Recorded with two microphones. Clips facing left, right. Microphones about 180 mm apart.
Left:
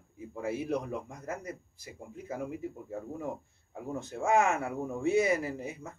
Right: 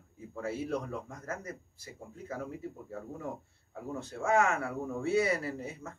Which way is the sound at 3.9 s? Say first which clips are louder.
Left 2 dB; 20° left (ahead or behind).